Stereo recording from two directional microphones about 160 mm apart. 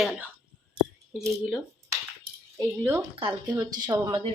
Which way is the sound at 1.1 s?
Centre (ahead or behind).